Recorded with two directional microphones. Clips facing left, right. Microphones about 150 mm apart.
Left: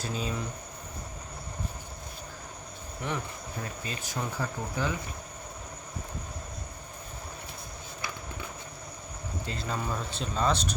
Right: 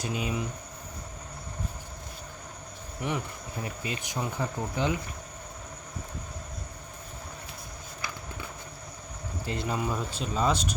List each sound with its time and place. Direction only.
0.1 s speech: 15° right (ahead or behind)
3.0 s speech: 15° right (ahead or behind)
9.5 s speech: 20° right (ahead or behind)
9.7 s speech: 10° right (ahead or behind)